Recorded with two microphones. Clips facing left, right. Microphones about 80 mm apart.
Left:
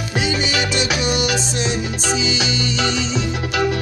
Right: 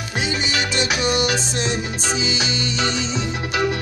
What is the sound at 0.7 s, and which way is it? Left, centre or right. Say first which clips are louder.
Music: right 2 dB; right.